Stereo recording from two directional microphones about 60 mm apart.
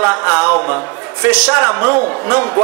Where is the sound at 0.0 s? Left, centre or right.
Right.